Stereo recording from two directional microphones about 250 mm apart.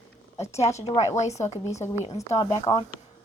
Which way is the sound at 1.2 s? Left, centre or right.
Left.